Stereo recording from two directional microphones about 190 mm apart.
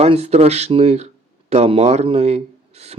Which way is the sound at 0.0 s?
35° right (ahead or behind).